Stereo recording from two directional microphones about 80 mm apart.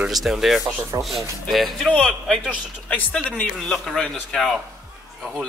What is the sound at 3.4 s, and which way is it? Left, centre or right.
Speech, centre.